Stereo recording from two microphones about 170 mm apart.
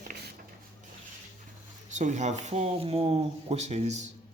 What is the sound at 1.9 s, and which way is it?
Speech, 45° right (ahead or behind).